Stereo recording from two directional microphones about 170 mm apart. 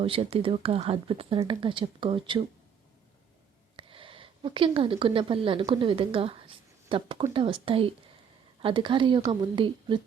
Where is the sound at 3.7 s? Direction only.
30° right (ahead or behind).